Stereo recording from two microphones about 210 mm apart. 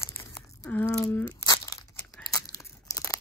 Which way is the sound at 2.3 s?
15° left (ahead or behind).